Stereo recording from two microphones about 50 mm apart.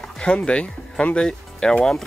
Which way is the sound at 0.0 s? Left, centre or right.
Left.